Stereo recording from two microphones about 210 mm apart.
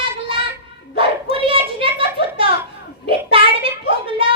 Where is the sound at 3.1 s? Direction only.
25° right (ahead or behind).